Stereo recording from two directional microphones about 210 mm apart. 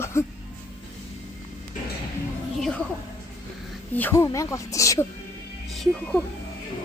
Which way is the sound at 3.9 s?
10° left (ahead or behind).